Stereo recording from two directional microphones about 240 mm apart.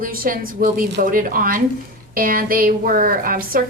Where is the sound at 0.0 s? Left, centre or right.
Right.